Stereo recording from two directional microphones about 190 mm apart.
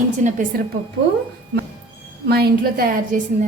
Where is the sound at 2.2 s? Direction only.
55° right (ahead or behind).